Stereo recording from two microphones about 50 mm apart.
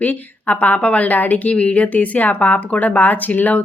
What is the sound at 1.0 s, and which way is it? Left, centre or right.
Speech, left.